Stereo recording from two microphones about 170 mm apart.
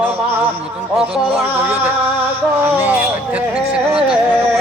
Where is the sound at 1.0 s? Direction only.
Centre (ahead or behind).